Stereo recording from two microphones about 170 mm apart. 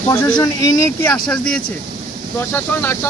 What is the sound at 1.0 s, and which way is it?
Speech, 10° left (ahead or behind).